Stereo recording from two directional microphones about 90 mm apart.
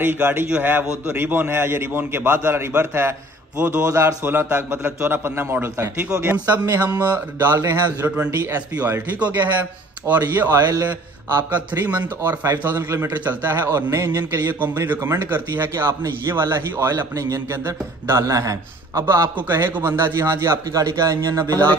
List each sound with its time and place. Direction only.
0.0 s a man's voice: 25° right (ahead or behind)
9.2 s a man's voice: 20° right (ahead or behind)
16.9 s a man's voice: 45° right (ahead or behind)
17.6 s a man's voice: 30° right (ahead or behind)